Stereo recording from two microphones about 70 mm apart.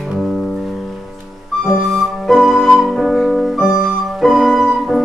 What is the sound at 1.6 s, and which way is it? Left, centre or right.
Flute, centre.